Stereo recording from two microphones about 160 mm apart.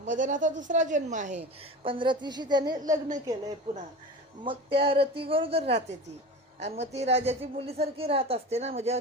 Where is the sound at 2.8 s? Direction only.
50° right (ahead or behind).